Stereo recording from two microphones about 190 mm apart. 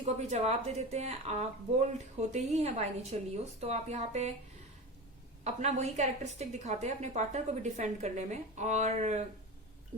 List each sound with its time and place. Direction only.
0.0 s a woman's voice: 35° right (ahead or behind)
5.4 s a woman's voice: 35° right (ahead or behind)